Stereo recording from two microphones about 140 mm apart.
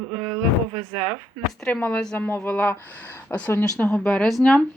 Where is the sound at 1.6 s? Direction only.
10° left (ahead or behind).